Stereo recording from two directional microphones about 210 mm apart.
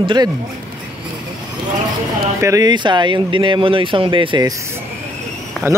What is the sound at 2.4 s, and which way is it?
Speech, 15° right (ahead or behind).